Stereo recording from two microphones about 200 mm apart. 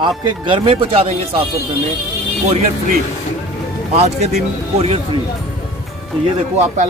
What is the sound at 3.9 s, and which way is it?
Speech, 35° right (ahead or behind).